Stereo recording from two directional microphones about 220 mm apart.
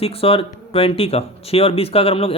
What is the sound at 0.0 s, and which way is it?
Speech, 25° left (ahead or behind).